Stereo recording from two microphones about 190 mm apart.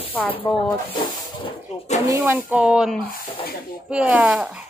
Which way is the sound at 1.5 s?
35° left (ahead or behind).